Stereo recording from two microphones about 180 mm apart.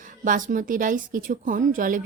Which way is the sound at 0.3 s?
45° right (ahead or behind).